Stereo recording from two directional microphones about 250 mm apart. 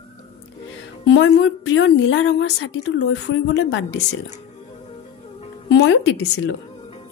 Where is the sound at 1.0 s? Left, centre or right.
Left.